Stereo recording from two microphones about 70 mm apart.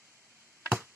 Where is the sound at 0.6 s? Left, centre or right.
Right.